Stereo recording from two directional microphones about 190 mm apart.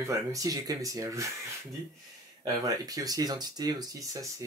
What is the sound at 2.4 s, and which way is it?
Speech, 20° right (ahead or behind).